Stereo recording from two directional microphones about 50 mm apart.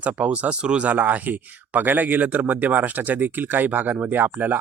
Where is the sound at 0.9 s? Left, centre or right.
Right.